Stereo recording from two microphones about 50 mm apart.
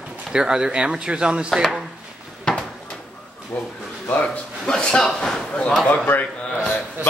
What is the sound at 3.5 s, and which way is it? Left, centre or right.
Speech, left.